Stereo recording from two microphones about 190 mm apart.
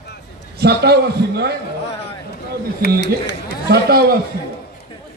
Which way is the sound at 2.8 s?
65° left (ahead or behind).